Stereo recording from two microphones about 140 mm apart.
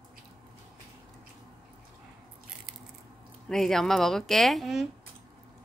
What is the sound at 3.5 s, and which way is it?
A woman's voice, 5° left (ahead or behind).